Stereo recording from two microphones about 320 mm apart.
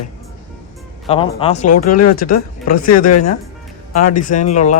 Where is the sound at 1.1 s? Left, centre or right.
Centre.